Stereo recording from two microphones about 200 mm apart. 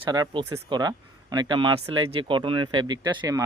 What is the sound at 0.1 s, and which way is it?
Speech, 20° right (ahead or behind).